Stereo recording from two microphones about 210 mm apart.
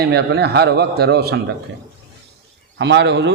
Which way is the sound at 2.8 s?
55° right (ahead or behind).